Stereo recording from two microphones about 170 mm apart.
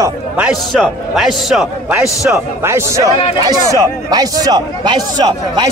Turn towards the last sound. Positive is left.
turn(degrees=-25)  # may be behind; listen again after turning